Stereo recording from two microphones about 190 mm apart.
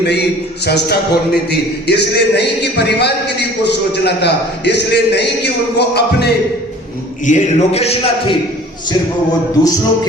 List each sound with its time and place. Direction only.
0.0 s a man's voice: 60° left (ahead or behind)
7.3 s a man's voice: 35° left (ahead or behind)
9.6 s music: 20° left (ahead or behind)